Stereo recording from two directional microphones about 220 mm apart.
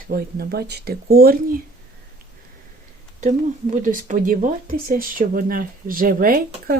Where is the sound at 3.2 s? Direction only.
35° right (ahead or behind).